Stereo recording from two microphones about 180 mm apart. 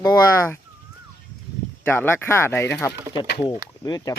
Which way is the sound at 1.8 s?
10° left (ahead or behind).